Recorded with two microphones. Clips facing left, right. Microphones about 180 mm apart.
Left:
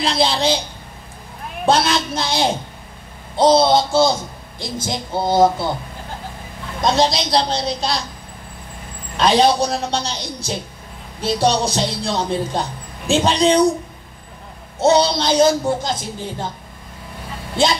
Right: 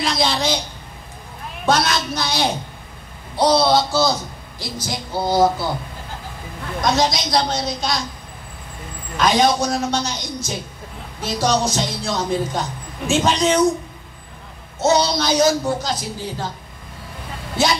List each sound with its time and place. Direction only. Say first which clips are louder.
0.0 s speech: left 2 dB; 30° left (ahead or behind)
1.7 s speech: left 2 dB; 30° left (ahead or behind)
6.8 s speech: left 2 dB; 30° left (ahead or behind)
9.1 s speech: left 2 dB; 30° left (ahead or behind)
14.8 s speech: left 3 dB; 30° left (ahead or behind)